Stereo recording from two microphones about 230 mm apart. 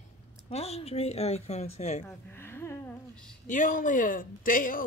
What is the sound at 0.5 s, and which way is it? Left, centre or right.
Speech, left.